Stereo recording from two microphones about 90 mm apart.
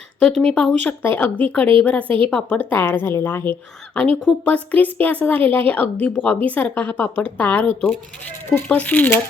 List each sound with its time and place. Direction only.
0.2 s a woman's voice: 5° left (ahead or behind)
2.0 s a woman's voice: 75° right (ahead or behind)
2.3 s a woman's voice: 15° left (ahead or behind)
2.7 s a woman's voice: 25° left (ahead or behind)